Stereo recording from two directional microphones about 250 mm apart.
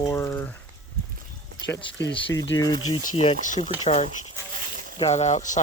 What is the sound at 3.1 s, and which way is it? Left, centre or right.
Speech, left.